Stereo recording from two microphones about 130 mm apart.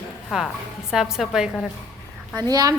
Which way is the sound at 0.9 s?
5° right (ahead or behind).